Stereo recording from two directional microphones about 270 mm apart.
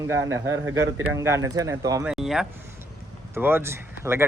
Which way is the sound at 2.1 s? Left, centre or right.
Centre.